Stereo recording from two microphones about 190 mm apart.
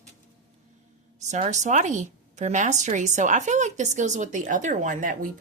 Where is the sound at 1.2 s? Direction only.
40° right (ahead or behind).